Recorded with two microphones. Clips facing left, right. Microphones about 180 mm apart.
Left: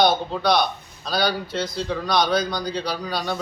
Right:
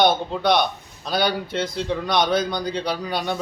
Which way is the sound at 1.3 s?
55° right (ahead or behind).